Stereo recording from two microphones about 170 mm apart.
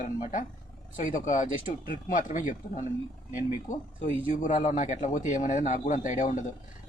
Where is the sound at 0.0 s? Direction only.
50° left (ahead or behind).